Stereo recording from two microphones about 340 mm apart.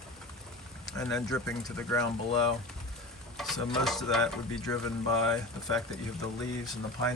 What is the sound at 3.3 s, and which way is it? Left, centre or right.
Speech, centre.